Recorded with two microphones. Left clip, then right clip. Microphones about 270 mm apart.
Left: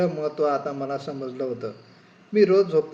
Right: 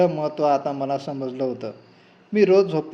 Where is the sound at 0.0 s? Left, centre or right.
Right.